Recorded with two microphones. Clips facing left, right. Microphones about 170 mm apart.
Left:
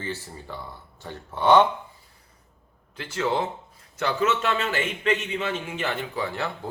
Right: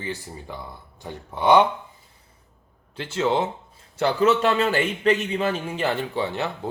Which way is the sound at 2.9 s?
25° right (ahead or behind).